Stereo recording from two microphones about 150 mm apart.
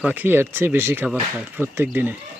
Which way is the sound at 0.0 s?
10° right (ahead or behind).